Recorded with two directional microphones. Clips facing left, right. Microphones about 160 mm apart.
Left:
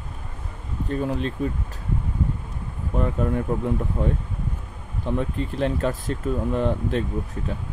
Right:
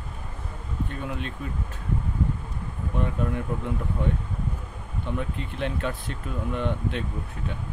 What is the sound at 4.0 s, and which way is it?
Speech, 35° left (ahead or behind).